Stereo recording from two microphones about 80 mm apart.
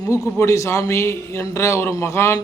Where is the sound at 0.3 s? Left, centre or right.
Left.